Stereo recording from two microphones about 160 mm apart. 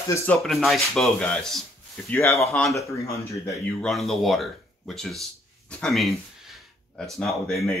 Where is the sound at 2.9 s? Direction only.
20° left (ahead or behind).